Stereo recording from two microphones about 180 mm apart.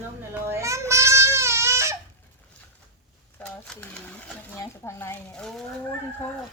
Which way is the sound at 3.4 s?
10° left (ahead or behind).